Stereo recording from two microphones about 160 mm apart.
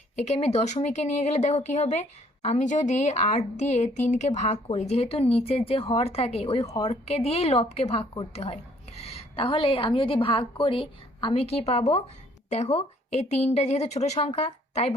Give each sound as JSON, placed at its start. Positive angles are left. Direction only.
{"t": 0.2, "sound": "a woman's voice", "side_deg": 40}